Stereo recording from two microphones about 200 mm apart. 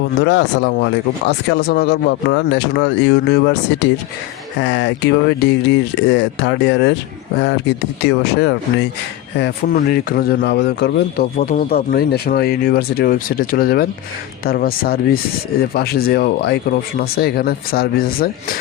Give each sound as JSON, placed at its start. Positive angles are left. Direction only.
{"t": 0.2, "sound": "speech", "side_deg": 60}
{"t": 11.3, "sound": "speech", "side_deg": 40}